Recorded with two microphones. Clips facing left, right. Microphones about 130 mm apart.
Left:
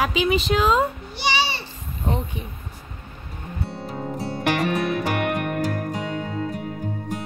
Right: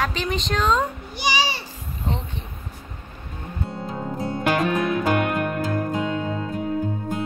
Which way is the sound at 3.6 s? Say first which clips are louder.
Right 1 dB; 20° right (ahead or behind).